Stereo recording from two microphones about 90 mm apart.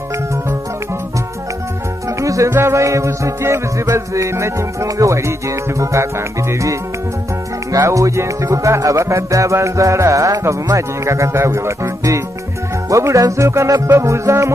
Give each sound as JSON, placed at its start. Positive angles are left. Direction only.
{"t": 2.0, "sound": "music", "side_deg": -35}